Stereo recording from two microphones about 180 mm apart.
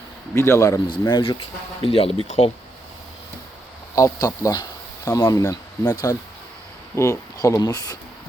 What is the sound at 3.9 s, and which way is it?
Speech, 20° left (ahead or behind).